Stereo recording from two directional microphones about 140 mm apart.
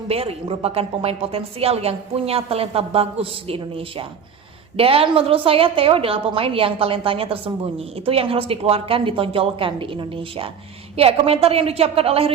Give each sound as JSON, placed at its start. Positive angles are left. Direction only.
{"t": 0.1, "sound": "a woman's voice", "side_deg": -45}